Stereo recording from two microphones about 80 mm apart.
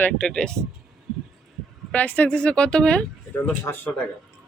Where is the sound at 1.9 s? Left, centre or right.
Centre.